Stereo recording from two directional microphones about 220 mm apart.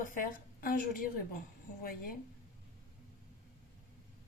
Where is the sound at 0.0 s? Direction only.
40° left (ahead or behind).